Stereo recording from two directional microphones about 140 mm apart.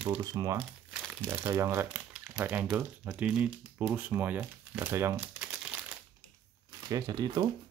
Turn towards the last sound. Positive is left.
turn(degrees=-30)  # may be behind; listen again after turning